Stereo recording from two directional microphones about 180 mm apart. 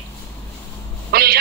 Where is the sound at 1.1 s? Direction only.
60° right (ahead or behind).